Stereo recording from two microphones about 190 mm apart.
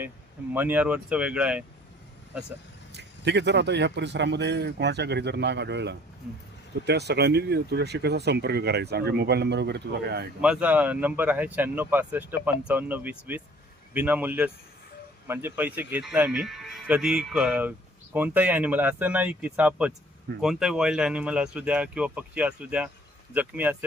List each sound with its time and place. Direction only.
0.5 s speech: 10° right (ahead or behind)
2.9 s speech: 65° right (ahead or behind)
10.4 s speech: 5° right (ahead or behind)